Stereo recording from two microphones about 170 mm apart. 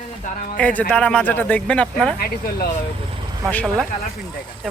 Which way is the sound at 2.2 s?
65° left (ahead or behind).